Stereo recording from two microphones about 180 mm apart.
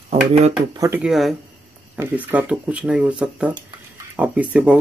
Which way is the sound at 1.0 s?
Centre (ahead or behind).